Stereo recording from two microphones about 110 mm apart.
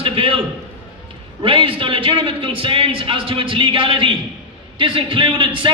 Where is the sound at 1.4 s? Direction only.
50° right (ahead or behind).